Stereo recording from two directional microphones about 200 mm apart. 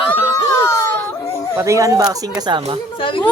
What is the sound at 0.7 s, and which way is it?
Baby cry, 15° left (ahead or behind).